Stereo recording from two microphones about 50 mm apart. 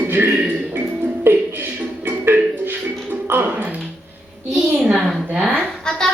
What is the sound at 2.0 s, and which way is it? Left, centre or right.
Music, right.